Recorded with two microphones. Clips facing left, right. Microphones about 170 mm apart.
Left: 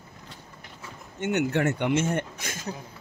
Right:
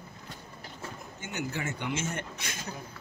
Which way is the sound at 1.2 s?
70° left (ahead or behind).